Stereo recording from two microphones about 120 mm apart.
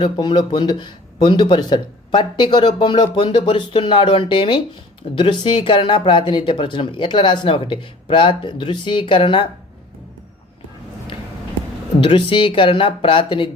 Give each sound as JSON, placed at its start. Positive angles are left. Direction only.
{"t": 0.0, "sound": "speech", "side_deg": 40}
{"t": 11.9, "sound": "speech", "side_deg": 45}